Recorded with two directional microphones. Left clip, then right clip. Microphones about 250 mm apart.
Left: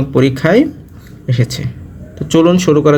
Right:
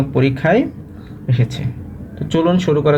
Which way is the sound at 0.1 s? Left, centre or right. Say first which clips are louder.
Left 5 dB; left.